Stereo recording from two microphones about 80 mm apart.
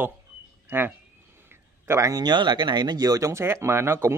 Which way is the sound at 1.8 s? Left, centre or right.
Right.